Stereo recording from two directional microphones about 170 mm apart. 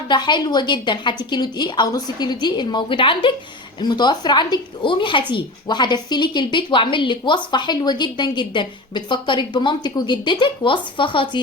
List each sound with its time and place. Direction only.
0.1 s a woman's voice: 25° left (ahead or behind)